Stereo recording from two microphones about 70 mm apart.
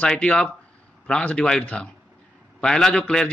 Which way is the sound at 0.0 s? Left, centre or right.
Centre.